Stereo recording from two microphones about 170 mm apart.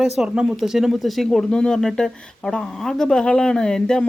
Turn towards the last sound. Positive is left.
turn(degrees=5)  # may be behind; listen again after turning